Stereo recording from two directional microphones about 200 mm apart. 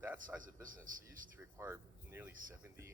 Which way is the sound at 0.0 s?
10° right (ahead or behind).